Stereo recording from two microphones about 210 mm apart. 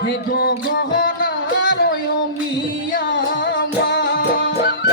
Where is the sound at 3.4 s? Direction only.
55° left (ahead or behind).